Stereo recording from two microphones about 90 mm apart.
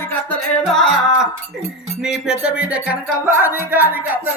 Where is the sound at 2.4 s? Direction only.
15° right (ahead or behind).